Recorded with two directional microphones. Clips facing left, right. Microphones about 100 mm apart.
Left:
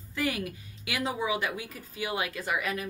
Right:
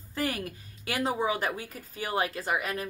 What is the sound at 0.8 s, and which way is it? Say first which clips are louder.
Speech: right 2 dB; 40° right (ahead or behind).